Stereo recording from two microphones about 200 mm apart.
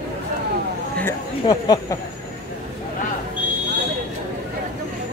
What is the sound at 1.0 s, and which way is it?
Speech, 20° left (ahead or behind).